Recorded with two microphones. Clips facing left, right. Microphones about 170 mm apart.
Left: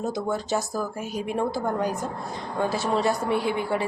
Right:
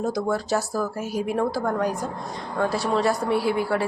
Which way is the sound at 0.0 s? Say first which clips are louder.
Right 3 dB; centre (ahead or behind).